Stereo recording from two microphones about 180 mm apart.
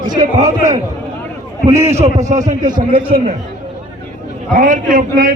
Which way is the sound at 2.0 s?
40° right (ahead or behind).